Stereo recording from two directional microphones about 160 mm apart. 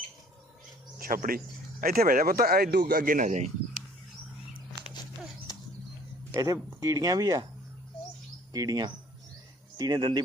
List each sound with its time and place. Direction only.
0.9 s speech: 60° right (ahead or behind)
6.3 s speech: 20° right (ahead or behind)
8.5 s speech: 25° right (ahead or behind)